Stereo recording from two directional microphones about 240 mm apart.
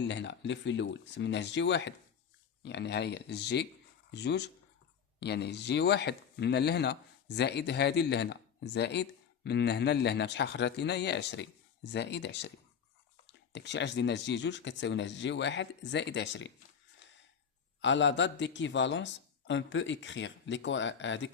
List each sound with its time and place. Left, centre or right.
0.0 s speech: left
17.7 s speech: left